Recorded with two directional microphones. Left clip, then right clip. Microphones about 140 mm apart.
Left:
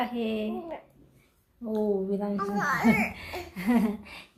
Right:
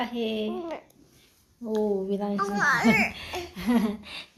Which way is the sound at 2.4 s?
15° right (ahead or behind).